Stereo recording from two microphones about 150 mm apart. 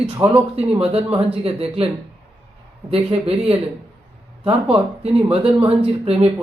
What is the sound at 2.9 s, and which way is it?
Speech, 40° right (ahead or behind).